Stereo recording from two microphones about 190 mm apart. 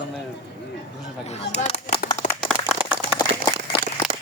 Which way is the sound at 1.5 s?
35° left (ahead or behind).